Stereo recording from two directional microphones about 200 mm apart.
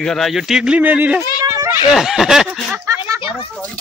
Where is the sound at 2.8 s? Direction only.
15° right (ahead or behind).